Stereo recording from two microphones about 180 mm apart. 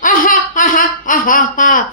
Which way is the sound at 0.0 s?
50° left (ahead or behind).